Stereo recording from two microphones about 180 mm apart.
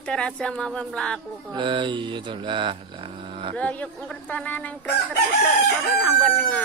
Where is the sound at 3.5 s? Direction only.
5° left (ahead or behind).